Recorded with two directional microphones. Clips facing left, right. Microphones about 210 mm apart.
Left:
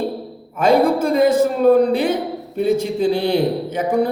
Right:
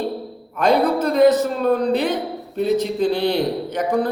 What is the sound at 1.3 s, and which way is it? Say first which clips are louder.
Speech: left 4 dB; 10° left (ahead or behind).